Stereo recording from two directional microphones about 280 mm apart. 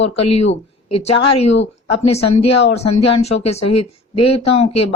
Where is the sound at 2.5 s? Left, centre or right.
Left.